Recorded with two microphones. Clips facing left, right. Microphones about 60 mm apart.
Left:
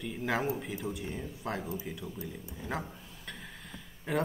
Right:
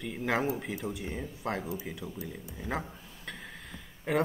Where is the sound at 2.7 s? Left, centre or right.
Centre.